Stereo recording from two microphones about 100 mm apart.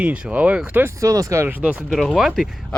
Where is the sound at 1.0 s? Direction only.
35° right (ahead or behind).